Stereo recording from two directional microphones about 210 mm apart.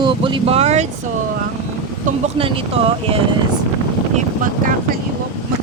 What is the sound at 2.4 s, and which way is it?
Speech, 25° right (ahead or behind).